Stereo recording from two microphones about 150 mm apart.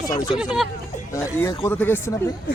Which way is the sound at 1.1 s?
20° left (ahead or behind).